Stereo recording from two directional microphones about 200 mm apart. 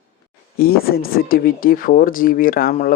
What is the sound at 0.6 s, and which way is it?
Speech, 50° left (ahead or behind).